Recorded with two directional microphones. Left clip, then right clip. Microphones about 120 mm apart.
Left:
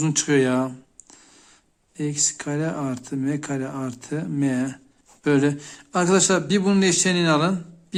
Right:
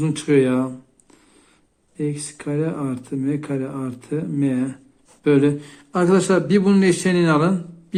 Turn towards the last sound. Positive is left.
turn(degrees=30)  # may be behind; listen again after turning